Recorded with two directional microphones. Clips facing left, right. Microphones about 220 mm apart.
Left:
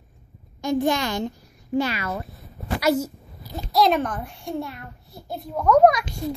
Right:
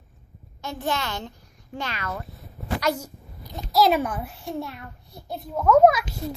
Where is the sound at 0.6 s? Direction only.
15° left (ahead or behind).